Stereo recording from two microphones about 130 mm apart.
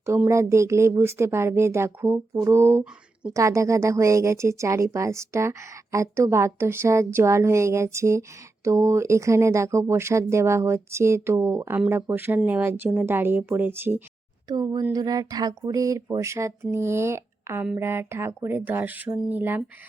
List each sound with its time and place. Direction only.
0.3 s a woman's voice: 20° right (ahead or behind)
14.4 s a woman's voice: 30° right (ahead or behind); by 19.6 s 15° right (ahead or behind)